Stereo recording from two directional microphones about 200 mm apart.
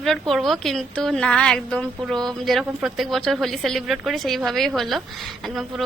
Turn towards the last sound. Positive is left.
turn(degrees=0)  # may be behind; listen again after turning